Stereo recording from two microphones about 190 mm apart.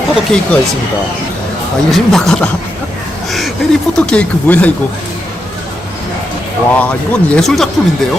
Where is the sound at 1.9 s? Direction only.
Centre (ahead or behind).